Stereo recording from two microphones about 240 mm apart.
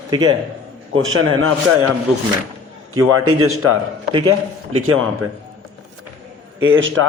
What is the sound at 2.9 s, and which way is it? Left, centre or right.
Speech, right.